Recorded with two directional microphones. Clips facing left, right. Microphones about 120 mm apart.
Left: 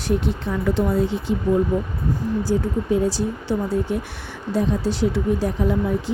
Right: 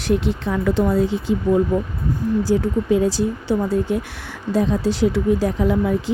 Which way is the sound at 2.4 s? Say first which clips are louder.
Right 3 dB; 90° right.